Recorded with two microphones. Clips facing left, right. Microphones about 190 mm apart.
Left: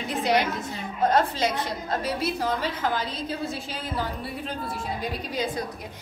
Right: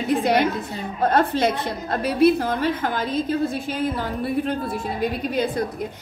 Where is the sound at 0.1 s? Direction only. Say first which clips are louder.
Right 5 dB; 55° right (ahead or behind).